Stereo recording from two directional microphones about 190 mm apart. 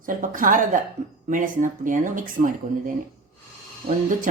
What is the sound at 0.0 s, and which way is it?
Speech, 45° right (ahead or behind).